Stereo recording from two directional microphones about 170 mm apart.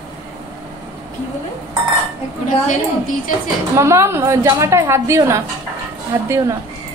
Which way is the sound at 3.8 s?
15° right (ahead or behind).